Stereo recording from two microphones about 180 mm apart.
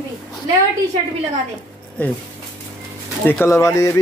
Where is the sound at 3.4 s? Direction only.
15° left (ahead or behind).